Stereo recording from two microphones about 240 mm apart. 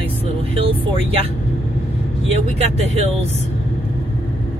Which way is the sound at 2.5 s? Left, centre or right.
Right.